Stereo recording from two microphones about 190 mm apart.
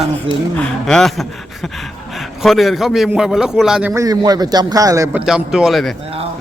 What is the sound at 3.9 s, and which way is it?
Speech, 20° right (ahead or behind).